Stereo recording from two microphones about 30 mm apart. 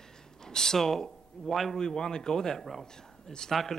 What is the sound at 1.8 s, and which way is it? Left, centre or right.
A woman's voice, left.